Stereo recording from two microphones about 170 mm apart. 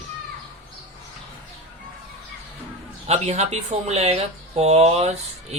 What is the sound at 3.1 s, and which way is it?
Speech, 40° right (ahead or behind).